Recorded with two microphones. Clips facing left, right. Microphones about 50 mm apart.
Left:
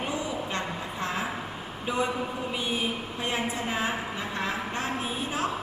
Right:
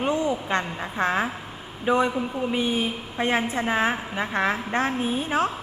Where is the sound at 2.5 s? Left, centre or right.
Right.